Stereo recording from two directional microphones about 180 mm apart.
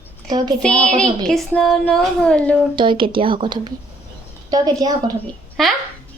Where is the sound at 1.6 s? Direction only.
Centre (ahead or behind).